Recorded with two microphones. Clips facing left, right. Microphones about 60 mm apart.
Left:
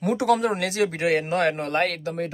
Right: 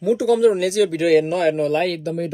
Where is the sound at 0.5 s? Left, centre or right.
Left.